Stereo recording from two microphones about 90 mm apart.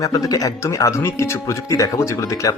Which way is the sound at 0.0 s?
40° left (ahead or behind).